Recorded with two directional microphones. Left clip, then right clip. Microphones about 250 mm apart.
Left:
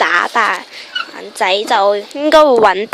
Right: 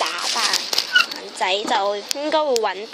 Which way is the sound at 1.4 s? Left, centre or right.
Left.